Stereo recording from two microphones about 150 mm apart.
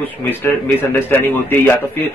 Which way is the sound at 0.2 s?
15° left (ahead or behind).